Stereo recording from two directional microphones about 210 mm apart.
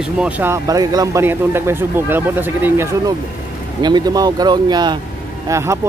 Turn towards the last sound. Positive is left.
turn(degrees=-15)  # may be behind; listen again after turning